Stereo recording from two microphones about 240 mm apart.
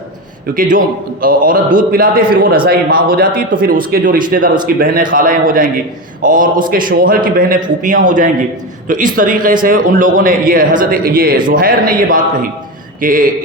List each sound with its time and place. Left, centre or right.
0.5 s speech: right